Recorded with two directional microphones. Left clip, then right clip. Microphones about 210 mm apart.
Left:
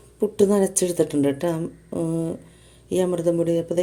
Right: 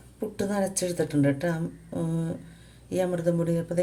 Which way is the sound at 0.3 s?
30° left (ahead or behind).